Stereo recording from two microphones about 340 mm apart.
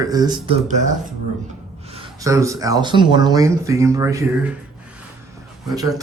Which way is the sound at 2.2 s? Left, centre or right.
Centre.